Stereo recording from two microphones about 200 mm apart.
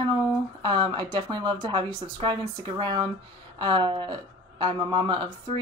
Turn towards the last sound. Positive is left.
turn(degrees=-25)  # may be behind; listen again after turning